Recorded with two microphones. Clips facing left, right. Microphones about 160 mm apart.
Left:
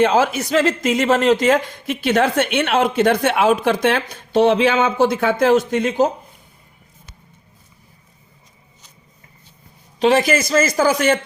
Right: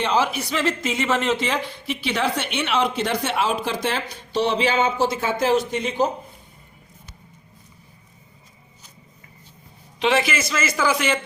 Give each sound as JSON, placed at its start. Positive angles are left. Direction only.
{"t": 0.0, "sound": "a woman's voice", "side_deg": 45}
{"t": 10.0, "sound": "speech", "side_deg": 40}